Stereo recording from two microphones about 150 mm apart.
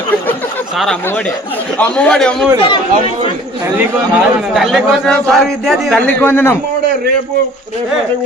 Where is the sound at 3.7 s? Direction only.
5° right (ahead or behind); by 6.5 s 15° left (ahead or behind).